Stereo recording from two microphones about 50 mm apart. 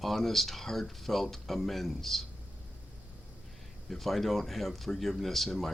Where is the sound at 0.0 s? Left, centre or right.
Centre.